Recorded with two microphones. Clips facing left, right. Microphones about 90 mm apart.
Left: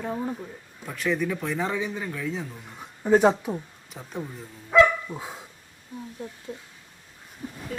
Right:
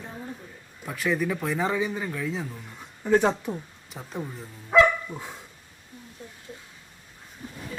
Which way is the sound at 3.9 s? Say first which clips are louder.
Even; centre (ahead or behind).